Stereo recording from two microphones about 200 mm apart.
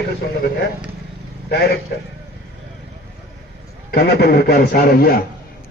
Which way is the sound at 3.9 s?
50° left (ahead or behind).